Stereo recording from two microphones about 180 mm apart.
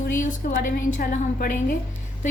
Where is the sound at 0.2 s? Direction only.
45° left (ahead or behind).